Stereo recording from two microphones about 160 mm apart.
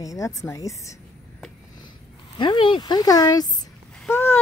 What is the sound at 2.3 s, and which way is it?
Speech, 30° left (ahead or behind).